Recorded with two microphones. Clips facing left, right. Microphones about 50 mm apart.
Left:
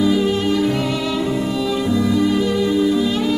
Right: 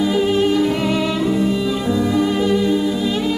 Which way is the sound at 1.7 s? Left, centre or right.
Centre.